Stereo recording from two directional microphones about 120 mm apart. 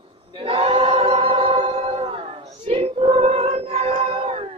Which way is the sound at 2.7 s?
45° right (ahead or behind).